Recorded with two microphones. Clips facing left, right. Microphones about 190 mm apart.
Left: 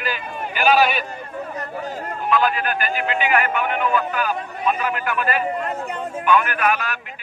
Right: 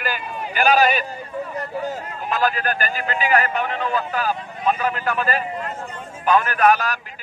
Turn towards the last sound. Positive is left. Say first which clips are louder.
# right 4 dB
turn(degrees=-40)  # may be behind; listen again after turning